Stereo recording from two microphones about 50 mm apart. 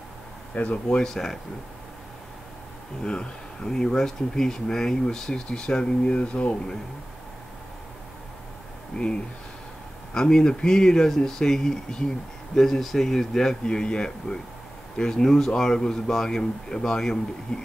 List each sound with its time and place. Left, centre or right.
0.8 s speech: centre
3.0 s speech: centre
8.9 s speech: centre